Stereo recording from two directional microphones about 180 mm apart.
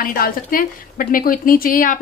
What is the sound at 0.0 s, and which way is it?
A woman's voice, 50° left (ahead or behind).